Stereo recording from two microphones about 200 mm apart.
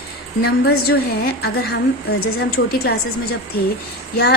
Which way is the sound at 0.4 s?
50° left (ahead or behind).